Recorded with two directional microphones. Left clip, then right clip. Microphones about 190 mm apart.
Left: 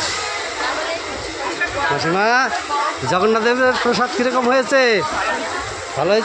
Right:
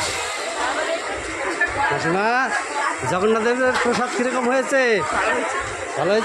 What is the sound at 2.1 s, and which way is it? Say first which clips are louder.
Speech: left 3 dB; 10° left (ahead or behind).